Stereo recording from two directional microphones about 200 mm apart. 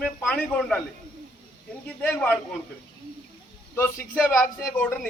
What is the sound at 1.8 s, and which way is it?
Speech, 5° left (ahead or behind).